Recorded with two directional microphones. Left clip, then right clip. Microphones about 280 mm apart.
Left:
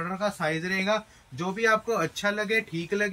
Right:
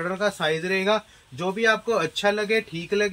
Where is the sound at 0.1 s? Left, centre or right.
Centre.